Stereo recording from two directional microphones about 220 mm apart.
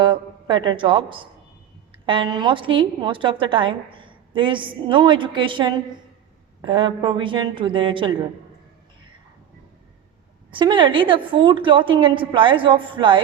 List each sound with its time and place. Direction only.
0.0 s a woman's voice: 20° right (ahead or behind)
10.5 s a woman's voice: 20° right (ahead or behind)